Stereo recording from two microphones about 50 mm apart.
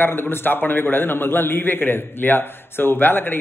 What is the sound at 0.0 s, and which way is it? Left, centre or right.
A man's voice, left.